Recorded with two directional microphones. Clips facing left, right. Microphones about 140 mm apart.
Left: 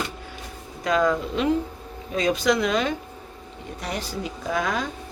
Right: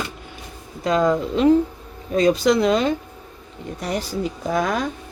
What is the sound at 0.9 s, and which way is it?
Speech, 30° right (ahead or behind).